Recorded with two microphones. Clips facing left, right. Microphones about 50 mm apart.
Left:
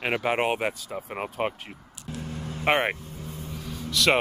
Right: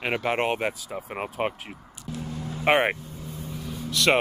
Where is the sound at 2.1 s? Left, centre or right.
Left.